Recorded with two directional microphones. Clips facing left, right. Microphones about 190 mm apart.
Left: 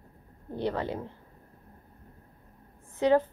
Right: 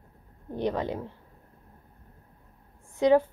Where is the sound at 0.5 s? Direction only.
15° right (ahead or behind).